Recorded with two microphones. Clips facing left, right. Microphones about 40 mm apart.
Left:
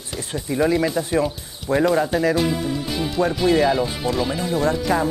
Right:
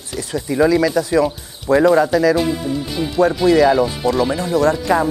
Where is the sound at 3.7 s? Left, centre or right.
Centre.